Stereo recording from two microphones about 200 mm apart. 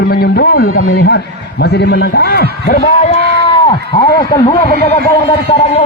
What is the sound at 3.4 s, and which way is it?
Cat, 25° left (ahead or behind).